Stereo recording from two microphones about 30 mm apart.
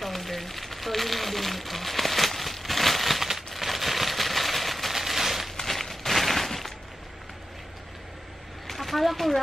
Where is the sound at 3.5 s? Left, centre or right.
Centre.